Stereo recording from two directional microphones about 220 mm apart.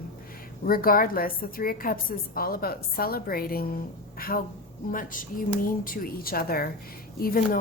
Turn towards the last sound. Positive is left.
turn(degrees=40)  # may be behind; listen again after turning